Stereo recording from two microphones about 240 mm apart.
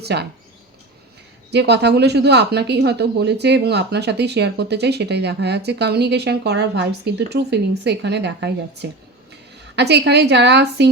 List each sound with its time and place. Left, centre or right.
0.0 s speech: right
1.5 s speech: right